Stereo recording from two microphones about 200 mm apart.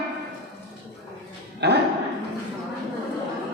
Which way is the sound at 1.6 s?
55° right (ahead or behind).